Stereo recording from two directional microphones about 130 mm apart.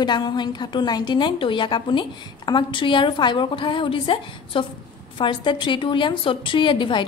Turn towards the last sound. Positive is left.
turn(degrees=40)  # may be behind; listen again after turning